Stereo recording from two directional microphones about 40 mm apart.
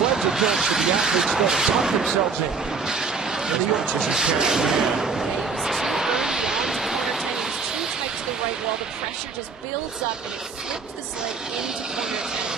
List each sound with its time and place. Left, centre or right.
0.2 s speech: centre
2.8 s vehicle: centre
3.8 s speech: centre
4.5 s artillery fire: centre
11.9 s speech: centre